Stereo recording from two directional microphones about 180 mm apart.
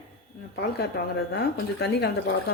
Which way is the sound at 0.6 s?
65° left (ahead or behind).